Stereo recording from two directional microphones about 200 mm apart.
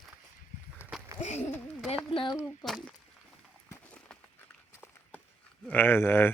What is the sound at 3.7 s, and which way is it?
Run, 5° left (ahead or behind).